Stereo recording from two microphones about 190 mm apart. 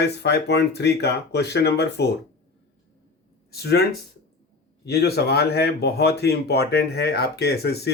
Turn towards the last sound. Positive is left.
turn(degrees=55)  # may be behind; listen again after turning